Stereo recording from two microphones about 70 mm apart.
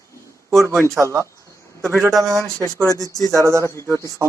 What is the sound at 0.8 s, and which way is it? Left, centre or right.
Speech, right.